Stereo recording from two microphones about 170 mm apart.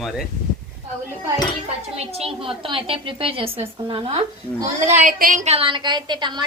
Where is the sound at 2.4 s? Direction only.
30° right (ahead or behind).